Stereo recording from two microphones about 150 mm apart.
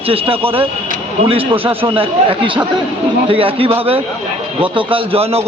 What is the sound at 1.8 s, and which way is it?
A man's voice, 35° right (ahead or behind).